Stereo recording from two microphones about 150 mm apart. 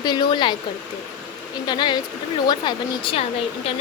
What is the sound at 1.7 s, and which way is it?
Speech, 30° left (ahead or behind).